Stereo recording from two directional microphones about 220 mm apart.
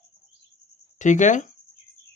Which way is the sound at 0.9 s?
35° left (ahead or behind).